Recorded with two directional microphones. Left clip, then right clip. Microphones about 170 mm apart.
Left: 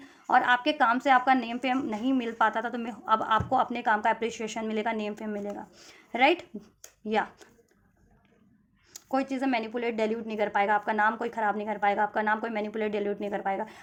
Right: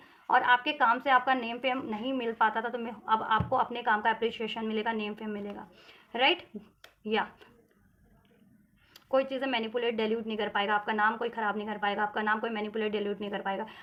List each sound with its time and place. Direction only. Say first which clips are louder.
0.0 s a woman's voice: left 2 dB; 45° left (ahead or behind)
8.9 s a woman's voice: right 2 dB; 40° left (ahead or behind)